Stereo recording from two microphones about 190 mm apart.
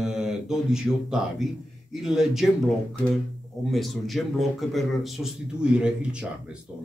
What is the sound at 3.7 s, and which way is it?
Speech, centre (ahead or behind).